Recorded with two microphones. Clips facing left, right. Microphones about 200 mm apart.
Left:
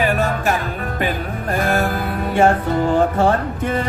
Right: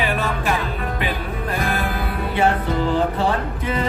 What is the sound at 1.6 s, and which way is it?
Music, 45° left (ahead or behind).